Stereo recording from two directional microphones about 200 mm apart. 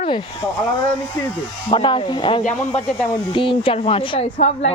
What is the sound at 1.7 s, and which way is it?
A woman's voice, 25° left (ahead or behind).